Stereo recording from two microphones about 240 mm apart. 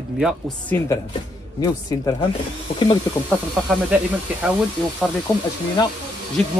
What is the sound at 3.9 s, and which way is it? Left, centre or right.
Speech, centre.